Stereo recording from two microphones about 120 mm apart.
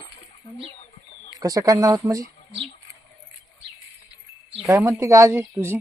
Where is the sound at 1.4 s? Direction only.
30° right (ahead or behind).